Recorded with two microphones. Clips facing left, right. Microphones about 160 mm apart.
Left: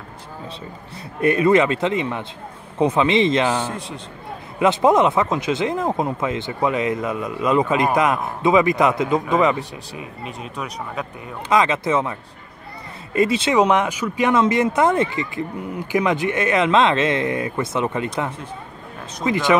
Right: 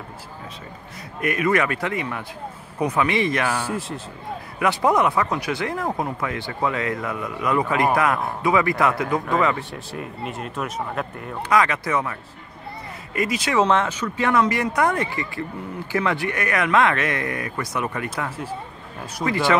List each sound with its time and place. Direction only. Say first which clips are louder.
1.2 s speech: left 6 dB; 30° left (ahead or behind)
3.5 s a man's voice: left 1 dB; 5° right (ahead or behind)
4.6 s speech: left 4 dB; 20° left (ahead or behind)
9.6 s speech: even; centre (ahead or behind)
11.4 s speech: left 2 dB; 20° left (ahead or behind)
13.6 s speech: left 1 dB; 15° left (ahead or behind)
19.2 s speech: left 1 dB; 20° left (ahead or behind)